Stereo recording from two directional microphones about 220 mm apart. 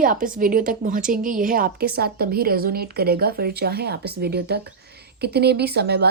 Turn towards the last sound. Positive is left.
turn(degrees=-45)  # may be behind; listen again after turning